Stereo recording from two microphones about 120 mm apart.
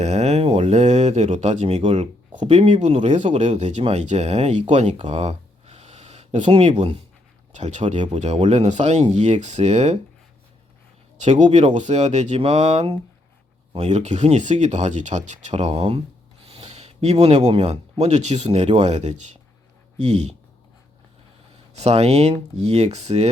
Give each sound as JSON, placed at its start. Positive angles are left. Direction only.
{"t": 0.0, "sound": "speech", "side_deg": -65}
{"t": 5.0, "sound": "a sound", "side_deg": -65}
{"t": 6.4, "sound": "speech", "side_deg": -55}
{"t": 11.2, "sound": "speech", "side_deg": -80}
{"t": 21.7, "sound": "speech", "side_deg": -65}